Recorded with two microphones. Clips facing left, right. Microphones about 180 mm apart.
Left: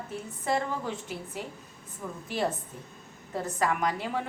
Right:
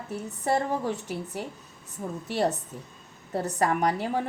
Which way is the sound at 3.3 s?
40° right (ahead or behind).